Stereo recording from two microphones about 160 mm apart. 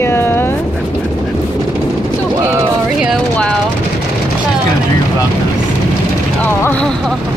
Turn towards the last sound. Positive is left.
turn(degrees=5)  # may be behind; listen again after turning